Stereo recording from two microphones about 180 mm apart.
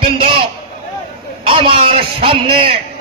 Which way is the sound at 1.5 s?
30° right (ahead or behind).